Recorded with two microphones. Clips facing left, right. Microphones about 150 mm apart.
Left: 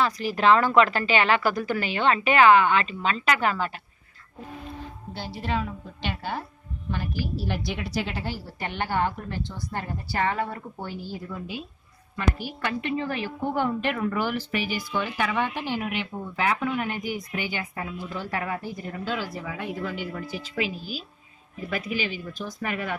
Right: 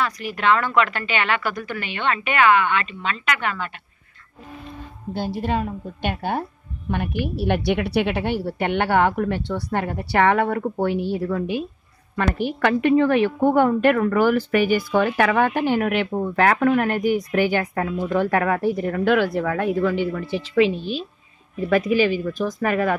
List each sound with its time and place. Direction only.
0.0 s a woman's voice: 30° left (ahead or behind)
5.1 s a woman's voice: 50° right (ahead or behind)
21.5 s speech: 85° right
21.8 s a woman's voice: 40° right (ahead or behind)